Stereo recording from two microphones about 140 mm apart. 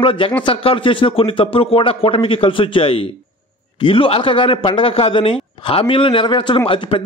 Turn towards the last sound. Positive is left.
turn(degrees=35)  # may be behind; listen again after turning